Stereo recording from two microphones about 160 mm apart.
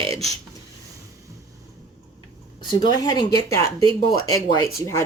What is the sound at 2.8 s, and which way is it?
Speech, 25° left (ahead or behind).